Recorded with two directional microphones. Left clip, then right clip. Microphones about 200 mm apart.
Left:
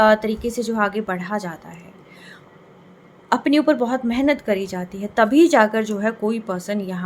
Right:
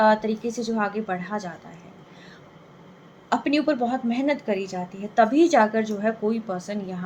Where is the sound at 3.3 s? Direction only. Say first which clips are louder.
Left 5 dB; 35° left (ahead or behind).